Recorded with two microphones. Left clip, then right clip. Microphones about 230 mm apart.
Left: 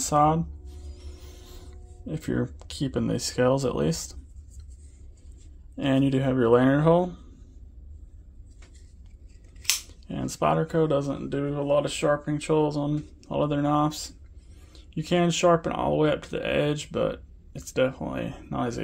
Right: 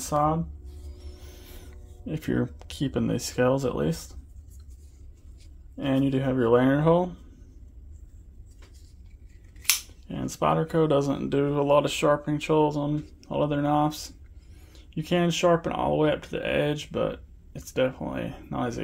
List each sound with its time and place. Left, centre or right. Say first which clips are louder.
0.0 s speech: left 3 dB; centre
5.8 s speech: left 2 dB; centre
9.6 s speech: right 1 dB; centre